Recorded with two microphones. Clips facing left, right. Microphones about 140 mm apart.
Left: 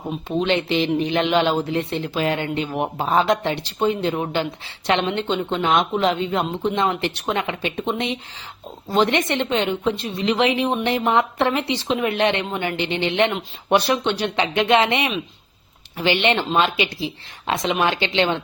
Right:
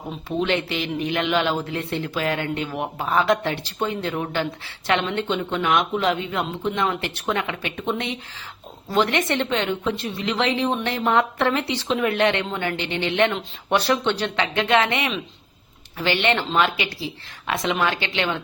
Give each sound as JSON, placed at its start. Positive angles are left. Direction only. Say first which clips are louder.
{"t": 0.3, "sound": "a woman's voice", "louder": "left 2 dB", "side_deg": 20}